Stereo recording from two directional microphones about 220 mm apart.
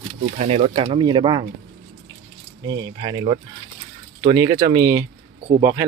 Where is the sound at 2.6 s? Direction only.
20° right (ahead or behind).